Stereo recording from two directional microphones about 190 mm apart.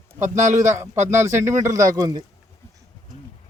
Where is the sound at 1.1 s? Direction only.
15° right (ahead or behind).